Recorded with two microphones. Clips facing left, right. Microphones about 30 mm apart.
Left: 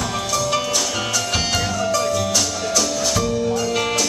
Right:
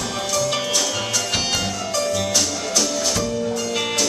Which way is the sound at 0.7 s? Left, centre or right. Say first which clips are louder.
Left 1 dB; centre.